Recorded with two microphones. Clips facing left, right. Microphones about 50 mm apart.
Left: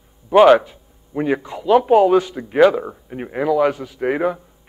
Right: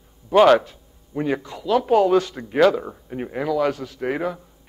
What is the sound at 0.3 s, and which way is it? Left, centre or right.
Speech, centre.